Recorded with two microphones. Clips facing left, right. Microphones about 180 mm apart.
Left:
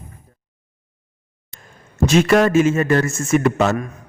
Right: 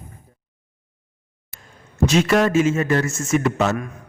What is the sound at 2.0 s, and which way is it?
A man's voice, 50° left (ahead or behind).